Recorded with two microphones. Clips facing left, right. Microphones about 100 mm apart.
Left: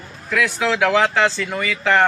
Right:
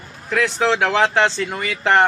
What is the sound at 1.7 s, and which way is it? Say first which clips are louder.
Speech: right 1 dB; 55° right (ahead or behind).